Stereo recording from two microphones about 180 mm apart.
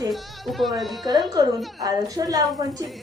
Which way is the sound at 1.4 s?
20° right (ahead or behind).